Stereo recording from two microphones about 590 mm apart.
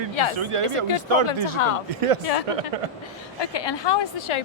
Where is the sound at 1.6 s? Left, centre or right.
Left.